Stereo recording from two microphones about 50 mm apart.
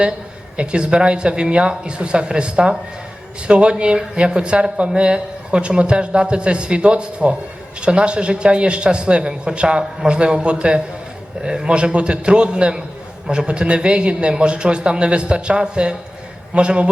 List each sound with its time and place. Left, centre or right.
0.5 s speech: centre